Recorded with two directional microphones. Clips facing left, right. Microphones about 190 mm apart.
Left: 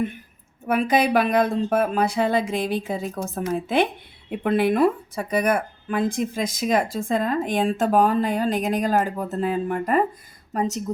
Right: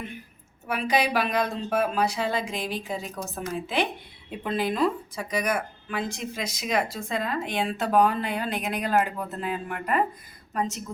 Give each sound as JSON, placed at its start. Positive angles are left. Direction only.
{"t": 0.7, "sound": "speech", "side_deg": 50}